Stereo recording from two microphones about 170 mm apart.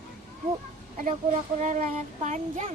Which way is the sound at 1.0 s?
45° right (ahead or behind).